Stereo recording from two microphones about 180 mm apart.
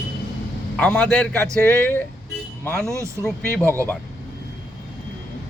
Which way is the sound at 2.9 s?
15° right (ahead or behind).